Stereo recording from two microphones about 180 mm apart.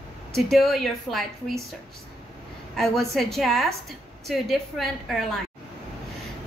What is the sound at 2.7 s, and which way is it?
A woman's voice, centre (ahead or behind).